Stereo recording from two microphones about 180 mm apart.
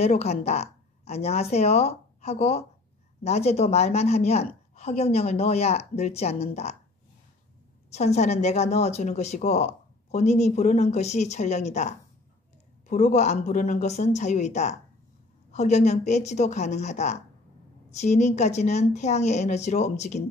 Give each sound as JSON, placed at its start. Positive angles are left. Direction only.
{"t": 0.0, "sound": "a woman's voice", "side_deg": 35}
{"t": 7.9, "sound": "a woman's voice", "side_deg": 35}
{"t": 12.9, "sound": "a woman's voice", "side_deg": 40}